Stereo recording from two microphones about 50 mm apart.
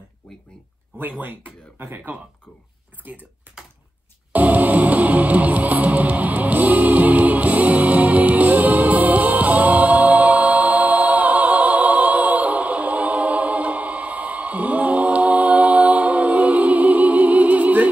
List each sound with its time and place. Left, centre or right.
1.2 s speech: right
4.3 s music: right